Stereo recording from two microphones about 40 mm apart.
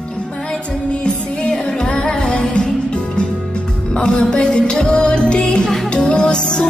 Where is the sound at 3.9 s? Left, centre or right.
Left.